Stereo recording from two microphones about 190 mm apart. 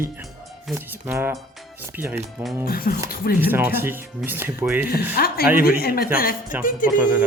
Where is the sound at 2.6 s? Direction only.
50° left (ahead or behind).